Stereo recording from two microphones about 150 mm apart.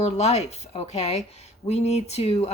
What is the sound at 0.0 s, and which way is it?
Speech, 45° left (ahead or behind).